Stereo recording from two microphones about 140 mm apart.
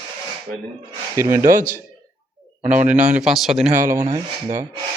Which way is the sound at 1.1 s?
20° right (ahead or behind).